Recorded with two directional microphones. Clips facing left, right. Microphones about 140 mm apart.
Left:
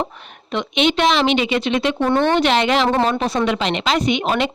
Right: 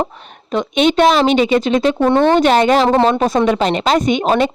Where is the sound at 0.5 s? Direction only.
45° right (ahead or behind).